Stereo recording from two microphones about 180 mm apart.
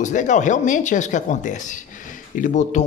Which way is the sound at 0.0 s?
45° left (ahead or behind).